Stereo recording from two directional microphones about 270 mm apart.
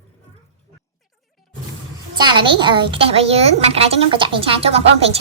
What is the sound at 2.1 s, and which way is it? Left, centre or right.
A woman's voice, centre.